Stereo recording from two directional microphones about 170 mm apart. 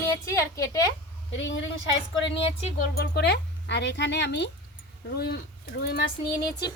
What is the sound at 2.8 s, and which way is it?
Speech, 70° left (ahead or behind).